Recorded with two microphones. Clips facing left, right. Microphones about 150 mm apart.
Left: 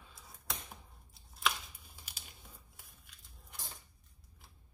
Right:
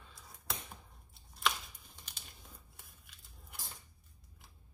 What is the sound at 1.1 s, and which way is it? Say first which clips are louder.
Chopping: even; centre (ahead or behind).